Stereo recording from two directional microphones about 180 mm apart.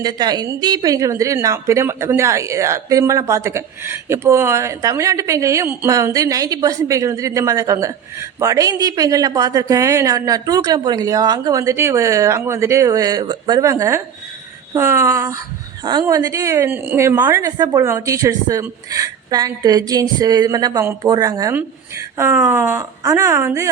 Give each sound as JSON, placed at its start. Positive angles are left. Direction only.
{"t": 0.0, "sound": "a woman's voice", "side_deg": -20}